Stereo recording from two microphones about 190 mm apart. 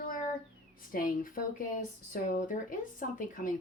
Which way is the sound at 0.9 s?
45° left (ahead or behind).